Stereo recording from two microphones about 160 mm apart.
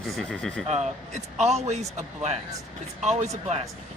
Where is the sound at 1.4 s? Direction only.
45° right (ahead or behind).